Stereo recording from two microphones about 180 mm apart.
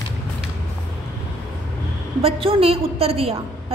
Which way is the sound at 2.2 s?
30° right (ahead or behind).